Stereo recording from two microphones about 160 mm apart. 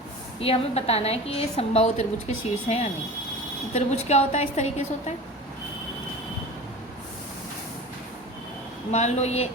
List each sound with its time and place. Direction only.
0.3 s a woman's voice: 40° left (ahead or behind)
8.9 s a woman's voice: 45° left (ahead or behind)